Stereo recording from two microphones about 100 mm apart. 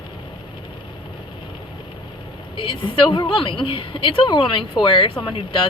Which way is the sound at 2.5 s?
60° left (ahead or behind).